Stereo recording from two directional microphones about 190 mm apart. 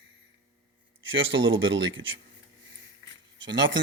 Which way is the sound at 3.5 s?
75° right (ahead or behind).